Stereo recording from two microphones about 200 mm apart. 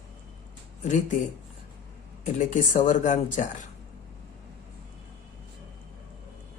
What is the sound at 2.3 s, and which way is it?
Speech, 40° left (ahead or behind).